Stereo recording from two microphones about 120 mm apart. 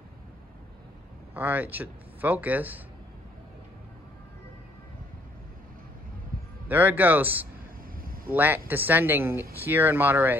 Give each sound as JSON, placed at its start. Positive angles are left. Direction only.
{"t": 1.3, "sound": "speech", "side_deg": -15}
{"t": 6.7, "sound": "speech", "side_deg": -15}